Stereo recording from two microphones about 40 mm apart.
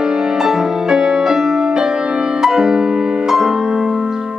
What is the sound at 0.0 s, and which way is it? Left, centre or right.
Music, centre.